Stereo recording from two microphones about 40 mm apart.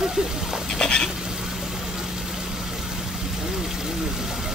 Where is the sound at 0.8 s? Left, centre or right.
Left.